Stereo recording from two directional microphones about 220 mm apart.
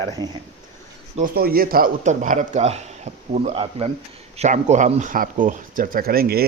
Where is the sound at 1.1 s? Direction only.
40° right (ahead or behind).